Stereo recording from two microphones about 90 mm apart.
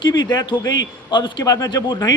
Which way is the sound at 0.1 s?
50° left (ahead or behind).